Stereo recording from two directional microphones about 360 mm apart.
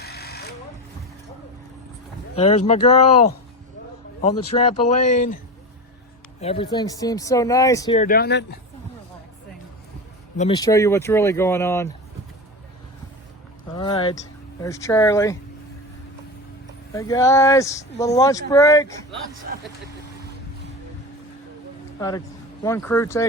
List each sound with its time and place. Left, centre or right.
0.0 s vehicle: left
2.3 s speech: centre
6.4 s speech: centre
10.3 s speech: centre
13.7 s speech: centre
16.9 s speech: centre
22.6 s speech: centre